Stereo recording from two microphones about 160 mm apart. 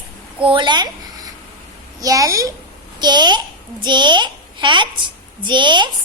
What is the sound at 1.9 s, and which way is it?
A child's voice, 20° right (ahead or behind).